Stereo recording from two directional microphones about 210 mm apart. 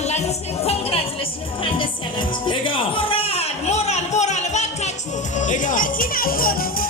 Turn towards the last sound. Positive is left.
turn(degrees=45)  # may be behind; listen again after turning